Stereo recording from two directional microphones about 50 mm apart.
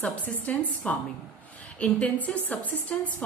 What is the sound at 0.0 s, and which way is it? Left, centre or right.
A woman's voice, left.